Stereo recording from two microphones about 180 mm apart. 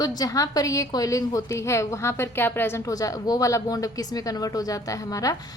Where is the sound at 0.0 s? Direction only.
20° left (ahead or behind).